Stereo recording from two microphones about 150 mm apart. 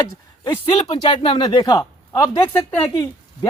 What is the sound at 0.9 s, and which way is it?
Speech, 35° left (ahead or behind).